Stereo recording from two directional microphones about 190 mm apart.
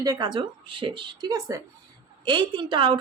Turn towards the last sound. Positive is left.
turn(degrees=-25)  # may be behind; listen again after turning